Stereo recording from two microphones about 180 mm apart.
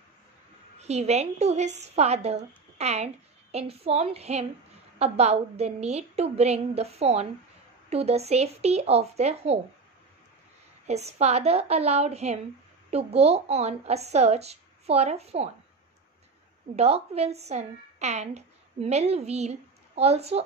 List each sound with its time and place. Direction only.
0.7 s a woman's voice: 35° right (ahead or behind)
10.9 s a woman's voice: 35° right (ahead or behind)
16.7 s a woman's voice: 35° right (ahead or behind)